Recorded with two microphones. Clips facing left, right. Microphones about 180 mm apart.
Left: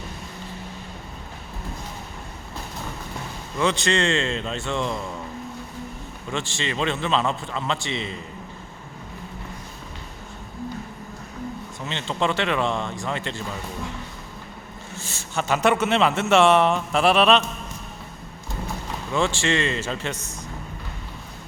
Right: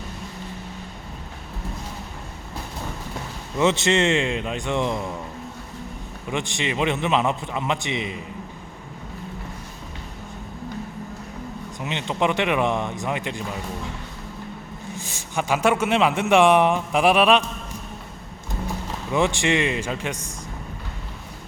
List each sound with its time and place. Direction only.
3.6 s a man's voice: 20° right (ahead or behind)
6.3 s a man's voice: 15° right (ahead or behind)
11.8 s a man's voice: 15° right (ahead or behind)
15.1 s a man's voice: 10° right (ahead or behind)
19.1 s a man's voice: 15° right (ahead or behind)